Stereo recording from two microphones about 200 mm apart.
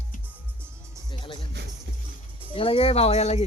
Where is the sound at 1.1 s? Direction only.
20° left (ahead or behind).